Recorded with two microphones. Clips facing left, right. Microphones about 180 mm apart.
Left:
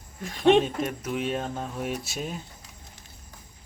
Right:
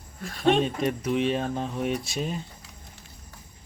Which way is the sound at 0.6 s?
Centre (ahead or behind).